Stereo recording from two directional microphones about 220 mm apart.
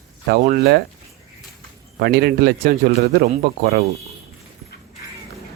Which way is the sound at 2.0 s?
50° right (ahead or behind).